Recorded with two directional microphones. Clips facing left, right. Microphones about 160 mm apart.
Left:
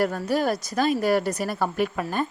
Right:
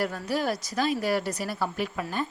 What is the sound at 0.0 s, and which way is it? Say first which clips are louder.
A woman's voice: left 5 dB; 45° left (ahead or behind).